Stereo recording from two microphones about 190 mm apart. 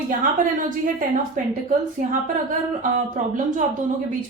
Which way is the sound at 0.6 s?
45° right (ahead or behind).